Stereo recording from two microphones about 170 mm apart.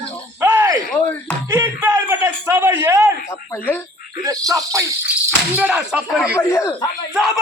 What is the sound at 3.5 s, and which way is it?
Speech, 10° left (ahead or behind).